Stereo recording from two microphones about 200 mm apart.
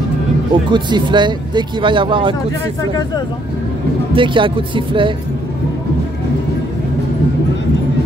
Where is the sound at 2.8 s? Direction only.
20° left (ahead or behind).